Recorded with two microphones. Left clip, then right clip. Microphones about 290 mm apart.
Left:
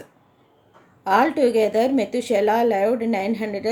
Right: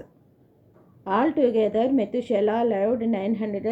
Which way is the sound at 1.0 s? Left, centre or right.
Centre.